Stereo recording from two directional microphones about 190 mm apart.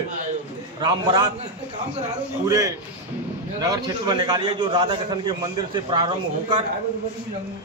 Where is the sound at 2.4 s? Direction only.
20° right (ahead or behind).